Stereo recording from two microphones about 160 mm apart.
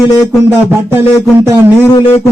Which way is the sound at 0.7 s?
15° right (ahead or behind).